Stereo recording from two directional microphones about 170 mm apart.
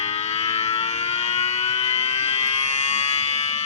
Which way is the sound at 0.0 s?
40° left (ahead or behind).